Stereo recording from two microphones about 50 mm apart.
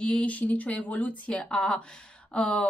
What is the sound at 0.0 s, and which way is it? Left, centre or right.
Speech, left.